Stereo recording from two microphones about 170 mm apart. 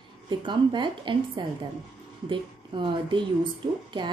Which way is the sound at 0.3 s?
30° right (ahead or behind).